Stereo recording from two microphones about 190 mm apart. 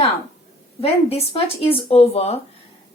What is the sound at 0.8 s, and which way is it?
Speech, 30° left (ahead or behind).